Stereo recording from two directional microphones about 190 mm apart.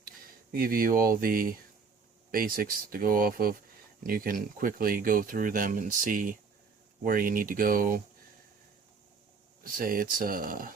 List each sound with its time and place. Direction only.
0.5 s speech: 50° right (ahead or behind)
9.7 s speech: 50° right (ahead or behind)